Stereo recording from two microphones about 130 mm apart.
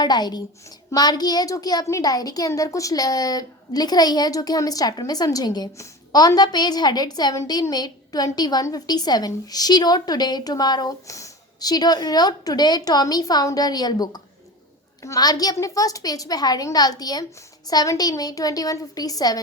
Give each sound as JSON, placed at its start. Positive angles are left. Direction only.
{"t": 0.0, "sound": "a child's voice", "side_deg": 30}